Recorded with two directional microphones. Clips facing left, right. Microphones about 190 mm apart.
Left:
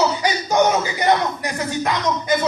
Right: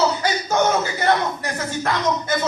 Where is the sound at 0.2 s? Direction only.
15° left (ahead or behind).